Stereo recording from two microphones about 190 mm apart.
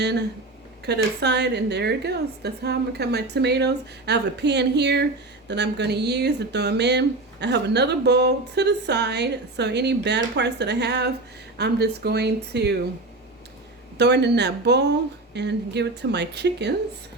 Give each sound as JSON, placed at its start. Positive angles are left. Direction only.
{"t": 0.0, "sound": "speech", "side_deg": -60}
{"t": 14.0, "sound": "speech", "side_deg": -60}